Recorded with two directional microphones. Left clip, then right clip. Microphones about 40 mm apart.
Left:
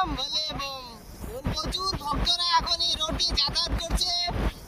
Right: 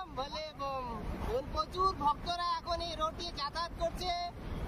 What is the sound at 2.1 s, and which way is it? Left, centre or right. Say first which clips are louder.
Speech: left 10 dB; left.